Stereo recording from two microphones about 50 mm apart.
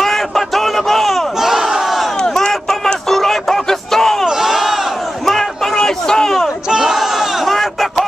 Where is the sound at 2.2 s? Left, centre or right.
Centre.